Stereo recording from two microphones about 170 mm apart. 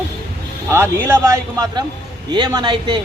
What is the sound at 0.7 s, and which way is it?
A man's voice, 15° right (ahead or behind).